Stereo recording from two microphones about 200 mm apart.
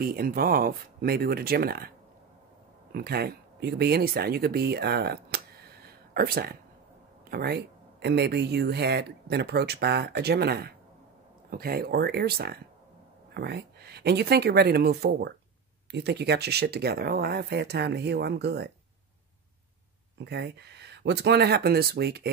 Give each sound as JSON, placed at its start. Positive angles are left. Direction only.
{"t": 0.0, "sound": "speech", "side_deg": -45}
{"t": 2.9, "sound": "speech", "side_deg": -50}
{"t": 20.2, "sound": "speech", "side_deg": -55}